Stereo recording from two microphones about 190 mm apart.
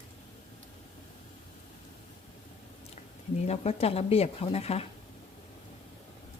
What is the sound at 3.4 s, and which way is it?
Speech, 35° left (ahead or behind).